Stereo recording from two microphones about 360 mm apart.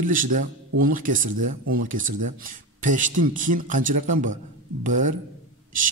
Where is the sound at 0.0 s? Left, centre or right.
Right.